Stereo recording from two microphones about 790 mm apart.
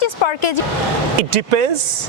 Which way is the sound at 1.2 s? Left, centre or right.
Right.